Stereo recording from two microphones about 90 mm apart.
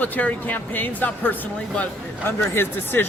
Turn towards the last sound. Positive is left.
turn(degrees=25)  # may be behind; listen again after turning